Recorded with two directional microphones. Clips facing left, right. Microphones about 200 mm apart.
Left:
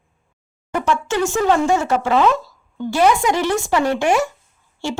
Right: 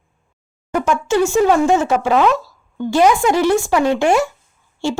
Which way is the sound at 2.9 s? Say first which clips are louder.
Right 2 dB; 15° right (ahead or behind).